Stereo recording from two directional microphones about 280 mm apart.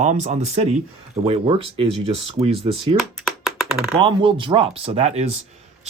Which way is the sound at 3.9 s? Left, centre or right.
Centre.